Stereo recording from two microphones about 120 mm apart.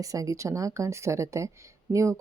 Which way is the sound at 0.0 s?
30° right (ahead or behind).